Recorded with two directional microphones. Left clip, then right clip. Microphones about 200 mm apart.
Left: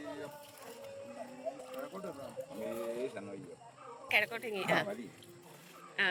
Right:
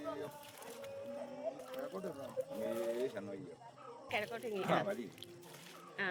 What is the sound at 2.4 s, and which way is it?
Speech, 5° right (ahead or behind).